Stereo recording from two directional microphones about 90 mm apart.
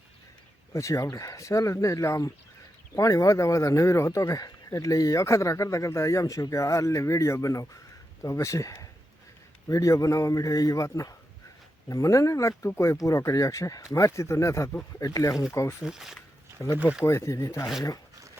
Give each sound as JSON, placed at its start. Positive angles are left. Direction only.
{"t": 0.7, "sound": "speech", "side_deg": 35}
{"t": 15.8, "sound": "speech", "side_deg": -5}
{"t": 16.6, "sound": "speech", "side_deg": 35}